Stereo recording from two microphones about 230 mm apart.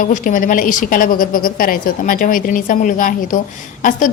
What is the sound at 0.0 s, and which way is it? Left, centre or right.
A woman's voice, left.